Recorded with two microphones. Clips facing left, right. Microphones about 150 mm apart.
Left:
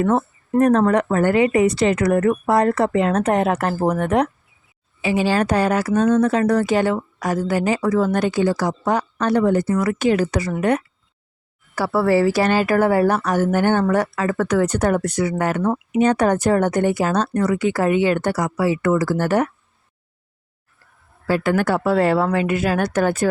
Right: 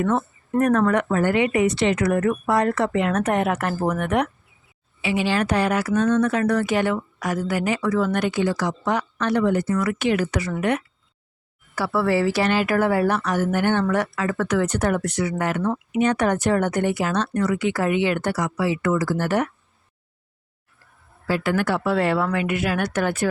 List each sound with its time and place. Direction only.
0.0 s speech: 35° left (ahead or behind)
21.2 s speech: 45° left (ahead or behind)